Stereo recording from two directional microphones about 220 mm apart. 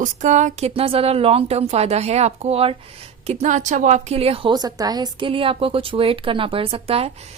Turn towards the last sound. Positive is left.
turn(degrees=-25)  # may be behind; listen again after turning